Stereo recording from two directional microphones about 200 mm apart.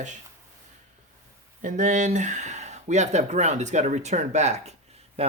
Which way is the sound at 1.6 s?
40° right (ahead or behind).